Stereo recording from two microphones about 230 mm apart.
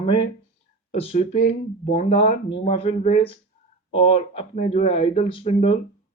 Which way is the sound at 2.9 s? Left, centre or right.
Left.